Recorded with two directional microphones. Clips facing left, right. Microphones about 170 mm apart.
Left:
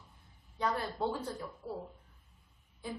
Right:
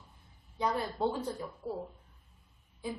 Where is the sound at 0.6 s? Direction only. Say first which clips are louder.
Right 2 dB; 15° right (ahead or behind).